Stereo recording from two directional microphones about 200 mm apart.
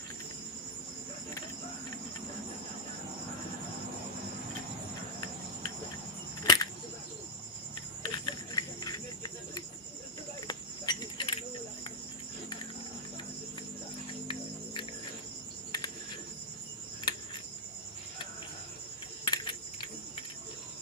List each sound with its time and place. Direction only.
6.4 s cricket: 20° left (ahead or behind)
8.0 s cricket: 20° left (ahead or behind)
10.4 s cricket: 20° left (ahead or behind)
14.3 s music: 25° left (ahead or behind)
17.1 s cricket: 25° left (ahead or behind)
19.2 s cricket: 25° left (ahead or behind)